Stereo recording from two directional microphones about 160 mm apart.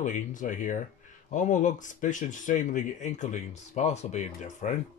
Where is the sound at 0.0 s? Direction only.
55° left (ahead or behind).